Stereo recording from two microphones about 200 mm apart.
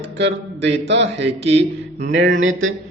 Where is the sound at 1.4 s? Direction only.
35° right (ahead or behind).